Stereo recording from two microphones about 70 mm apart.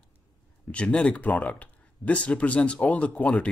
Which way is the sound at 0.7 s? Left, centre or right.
Centre.